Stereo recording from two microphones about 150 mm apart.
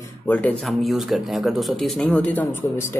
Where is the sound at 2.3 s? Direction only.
15° left (ahead or behind).